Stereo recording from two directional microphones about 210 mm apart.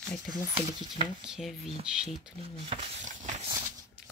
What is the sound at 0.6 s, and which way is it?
Speech, 25° right (ahead or behind).